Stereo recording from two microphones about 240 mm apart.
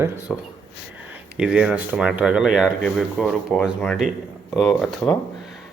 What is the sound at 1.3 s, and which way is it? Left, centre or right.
A man's voice, centre.